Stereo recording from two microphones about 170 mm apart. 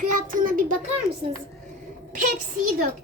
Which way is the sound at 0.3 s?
50° right (ahead or behind).